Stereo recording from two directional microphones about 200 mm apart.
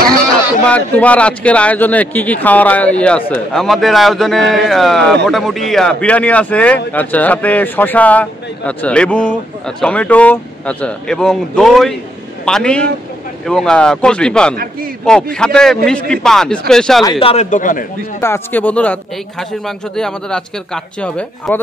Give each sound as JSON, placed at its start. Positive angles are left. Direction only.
{"t": 0.7, "sound": "speech", "side_deg": 5}
{"t": 17.0, "sound": "speech", "side_deg": 25}
{"t": 18.2, "sound": "speech", "side_deg": 10}